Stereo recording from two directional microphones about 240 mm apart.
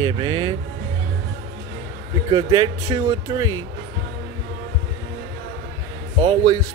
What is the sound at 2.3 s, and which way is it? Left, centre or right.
Speech, centre.